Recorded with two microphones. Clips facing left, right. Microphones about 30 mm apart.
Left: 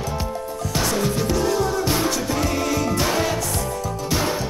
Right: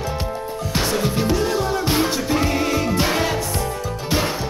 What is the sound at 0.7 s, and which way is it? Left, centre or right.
Music, right.